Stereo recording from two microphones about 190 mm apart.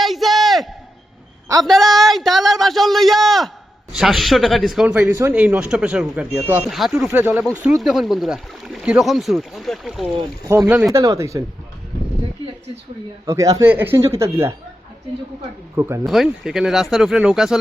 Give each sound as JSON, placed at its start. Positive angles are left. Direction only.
{"t": 0.0, "sound": "a sound", "side_deg": 0}
{"t": 1.6, "sound": "speech", "side_deg": 0}
{"t": 4.9, "sound": "speech", "side_deg": -10}
{"t": 6.7, "sound": "speech", "side_deg": 0}
{"t": 10.2, "sound": "speech", "side_deg": -20}
{"t": 13.2, "sound": "speech", "side_deg": -15}
{"t": 15.7, "sound": "speech", "side_deg": -15}
{"t": 16.0, "sound": "speech", "side_deg": 0}